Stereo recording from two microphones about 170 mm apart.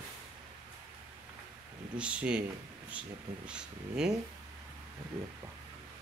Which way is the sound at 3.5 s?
5° right (ahead or behind).